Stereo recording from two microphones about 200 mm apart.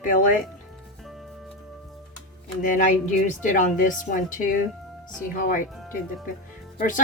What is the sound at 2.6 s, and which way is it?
A woman's voice, 40° left (ahead or behind).